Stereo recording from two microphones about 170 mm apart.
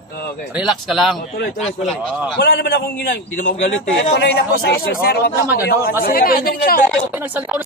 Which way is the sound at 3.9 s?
90° left.